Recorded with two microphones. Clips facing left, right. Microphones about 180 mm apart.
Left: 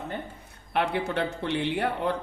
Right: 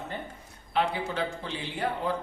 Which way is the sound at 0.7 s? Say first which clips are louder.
Left 2 dB; 65° left (ahead or behind).